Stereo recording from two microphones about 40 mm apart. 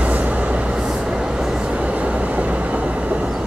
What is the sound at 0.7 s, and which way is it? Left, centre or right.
Vehicle, centre.